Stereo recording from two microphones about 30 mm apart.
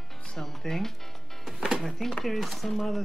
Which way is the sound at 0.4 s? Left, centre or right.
Centre.